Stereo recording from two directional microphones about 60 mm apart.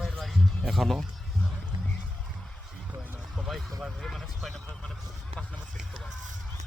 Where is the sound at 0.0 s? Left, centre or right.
Centre.